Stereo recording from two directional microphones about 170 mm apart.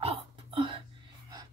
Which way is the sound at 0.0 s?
35° right (ahead or behind).